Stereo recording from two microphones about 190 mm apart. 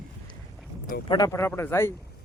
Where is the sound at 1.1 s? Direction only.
20° left (ahead or behind).